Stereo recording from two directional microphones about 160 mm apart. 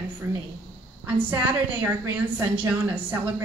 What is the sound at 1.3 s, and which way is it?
A woman's voice, 10° right (ahead or behind).